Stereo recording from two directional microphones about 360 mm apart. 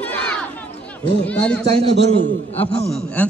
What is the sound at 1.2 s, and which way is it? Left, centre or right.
Speech, centre.